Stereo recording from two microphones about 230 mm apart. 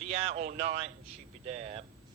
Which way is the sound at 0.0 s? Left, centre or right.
Right.